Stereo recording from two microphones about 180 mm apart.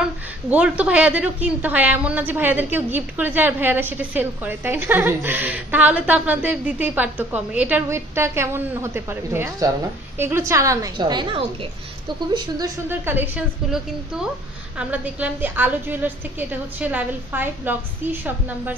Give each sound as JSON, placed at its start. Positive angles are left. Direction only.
{"t": 0.0, "sound": "a woman's voice", "side_deg": -10}
{"t": 13.1, "sound": "a woman's voice", "side_deg": -10}
{"t": 14.8, "sound": "a woman's voice", "side_deg": -10}